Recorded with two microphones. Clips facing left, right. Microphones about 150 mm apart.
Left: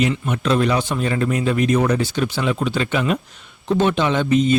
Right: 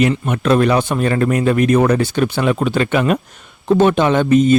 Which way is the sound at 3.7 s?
50° right (ahead or behind).